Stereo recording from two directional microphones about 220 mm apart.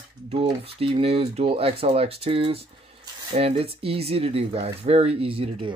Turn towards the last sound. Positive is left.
turn(degrees=-25)  # may be behind; listen again after turning